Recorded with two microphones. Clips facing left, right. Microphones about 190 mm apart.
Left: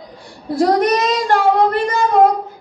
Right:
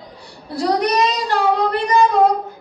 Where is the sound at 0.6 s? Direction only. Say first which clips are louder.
Left 3 dB; 50° left (ahead or behind).